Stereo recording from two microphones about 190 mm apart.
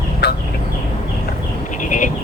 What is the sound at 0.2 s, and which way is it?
Turkey, 55° left (ahead or behind).